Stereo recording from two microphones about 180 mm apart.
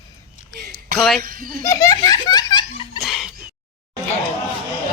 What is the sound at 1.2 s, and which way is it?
Speech, 50° right (ahead or behind).